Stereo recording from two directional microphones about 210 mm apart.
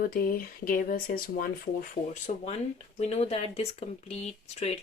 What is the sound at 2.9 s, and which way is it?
Speech, 30° left (ahead or behind).